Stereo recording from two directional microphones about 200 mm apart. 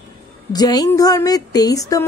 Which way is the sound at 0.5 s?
20° left (ahead or behind).